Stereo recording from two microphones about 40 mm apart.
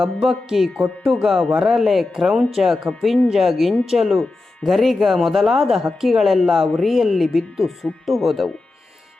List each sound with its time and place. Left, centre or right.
0.0 s music: centre
2.9 s speech: centre
3.3 s a woman's voice: centre